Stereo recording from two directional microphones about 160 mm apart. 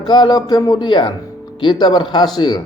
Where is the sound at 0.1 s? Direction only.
25° left (ahead or behind).